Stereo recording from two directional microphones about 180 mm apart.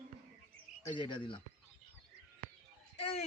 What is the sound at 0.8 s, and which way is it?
Speech, 25° left (ahead or behind).